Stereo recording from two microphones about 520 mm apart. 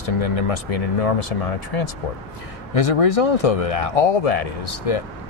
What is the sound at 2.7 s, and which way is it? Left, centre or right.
Speech, left.